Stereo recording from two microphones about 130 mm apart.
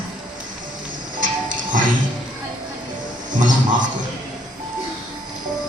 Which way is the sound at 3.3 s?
80° right.